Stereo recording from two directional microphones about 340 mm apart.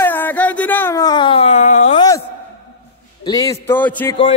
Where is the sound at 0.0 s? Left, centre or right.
Centre.